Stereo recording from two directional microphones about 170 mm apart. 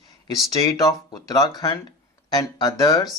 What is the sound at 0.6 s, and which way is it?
Speech, 20° left (ahead or behind).